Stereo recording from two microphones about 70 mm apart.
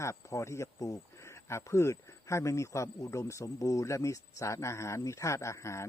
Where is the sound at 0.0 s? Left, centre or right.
Left.